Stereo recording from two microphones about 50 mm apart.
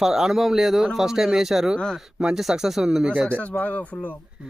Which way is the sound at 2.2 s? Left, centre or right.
Centre.